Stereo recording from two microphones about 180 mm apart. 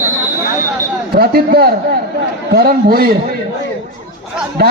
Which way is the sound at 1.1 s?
60° right (ahead or behind).